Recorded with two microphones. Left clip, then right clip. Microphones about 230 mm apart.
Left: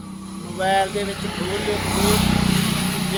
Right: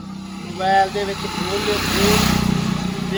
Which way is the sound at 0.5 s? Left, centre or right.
Centre.